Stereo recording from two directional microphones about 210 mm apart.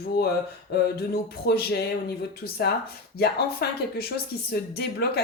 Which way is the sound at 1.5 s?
50° left (ahead or behind).